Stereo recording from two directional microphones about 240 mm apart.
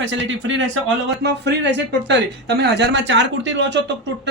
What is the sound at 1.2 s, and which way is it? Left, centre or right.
Speech, right.